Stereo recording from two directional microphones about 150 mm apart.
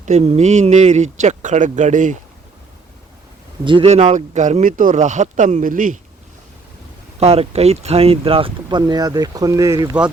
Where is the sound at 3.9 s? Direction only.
45° right (ahead or behind); by 6.0 s 65° right (ahead or behind).